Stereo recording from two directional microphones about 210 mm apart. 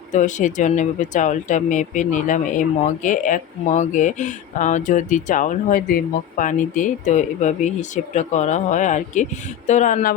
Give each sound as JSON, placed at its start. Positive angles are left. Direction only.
{"t": 0.1, "sound": "speech", "side_deg": 35}